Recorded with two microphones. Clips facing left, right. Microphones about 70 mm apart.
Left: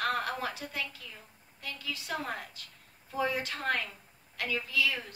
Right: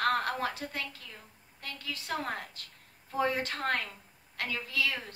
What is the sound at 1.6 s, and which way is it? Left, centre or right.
A woman's voice, right.